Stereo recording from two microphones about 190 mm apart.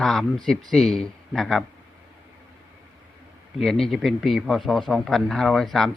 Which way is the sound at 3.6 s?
Centre (ahead or behind).